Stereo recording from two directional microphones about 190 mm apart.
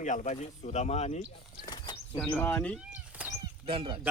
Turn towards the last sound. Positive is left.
turn(degrees=-25)  # may be behind; listen again after turning